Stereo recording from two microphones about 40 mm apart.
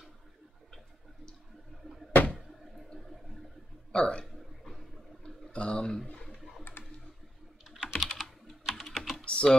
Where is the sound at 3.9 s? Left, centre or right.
Centre.